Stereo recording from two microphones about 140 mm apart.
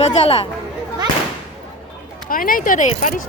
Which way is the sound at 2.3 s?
90° left.